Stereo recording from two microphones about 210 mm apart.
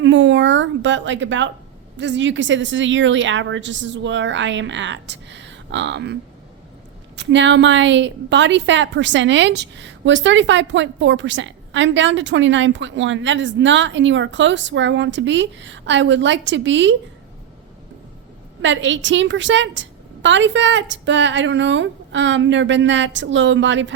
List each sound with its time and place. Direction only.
0.0 s a woman's voice: 60° right (ahead or behind)
7.2 s a woman's voice: 55° right (ahead or behind)
18.6 s a woman's voice: 60° right (ahead or behind)